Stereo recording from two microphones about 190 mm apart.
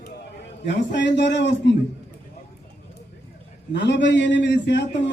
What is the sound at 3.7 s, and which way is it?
A man's voice, 65° left (ahead or behind).